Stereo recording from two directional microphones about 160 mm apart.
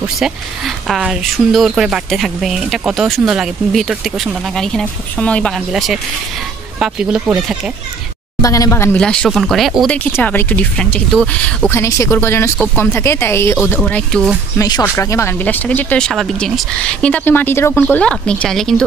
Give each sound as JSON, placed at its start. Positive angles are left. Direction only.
{"t": 0.0, "sound": "speech", "side_deg": 0}
{"t": 8.4, "sound": "a woman's voice", "side_deg": 20}
{"t": 8.9, "sound": "speech", "side_deg": 5}
{"t": 10.1, "sound": "speech", "side_deg": 10}
{"t": 14.6, "sound": "speech", "side_deg": 20}